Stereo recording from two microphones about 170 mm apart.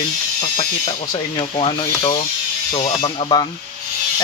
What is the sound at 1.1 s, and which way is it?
Speech, 30° left (ahead or behind).